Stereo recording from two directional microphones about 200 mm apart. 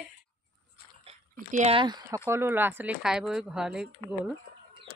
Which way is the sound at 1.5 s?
30° right (ahead or behind).